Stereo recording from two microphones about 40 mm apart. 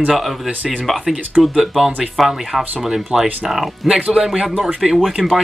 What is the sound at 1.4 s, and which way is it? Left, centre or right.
Speech, centre.